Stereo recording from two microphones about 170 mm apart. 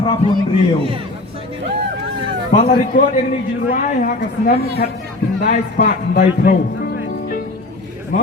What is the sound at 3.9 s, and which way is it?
A woman's voice, 50° left (ahead or behind).